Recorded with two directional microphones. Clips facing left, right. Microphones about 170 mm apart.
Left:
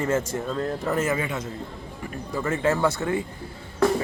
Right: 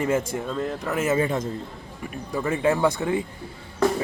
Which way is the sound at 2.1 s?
15° right (ahead or behind).